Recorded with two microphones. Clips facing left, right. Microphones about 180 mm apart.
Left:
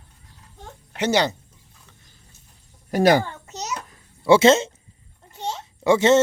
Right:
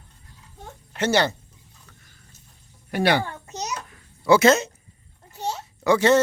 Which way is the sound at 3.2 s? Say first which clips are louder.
Even; 15° right (ahead or behind).